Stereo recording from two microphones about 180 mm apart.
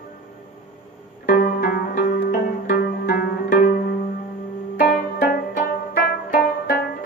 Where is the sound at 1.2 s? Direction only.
55° left (ahead or behind).